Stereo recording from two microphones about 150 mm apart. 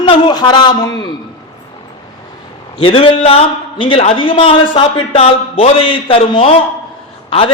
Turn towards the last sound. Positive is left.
turn(degrees=35)  # may be behind; listen again after turning